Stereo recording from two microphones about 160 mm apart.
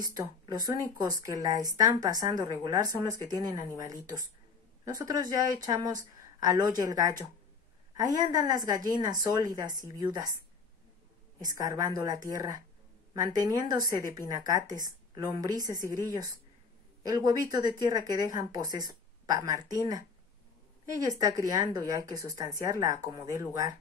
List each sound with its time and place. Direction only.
0.0 s speech: 20° right (ahead or behind)
11.4 s speech: 20° right (ahead or behind)